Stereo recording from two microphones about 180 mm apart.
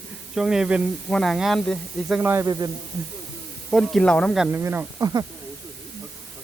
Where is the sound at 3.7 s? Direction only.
Centre (ahead or behind).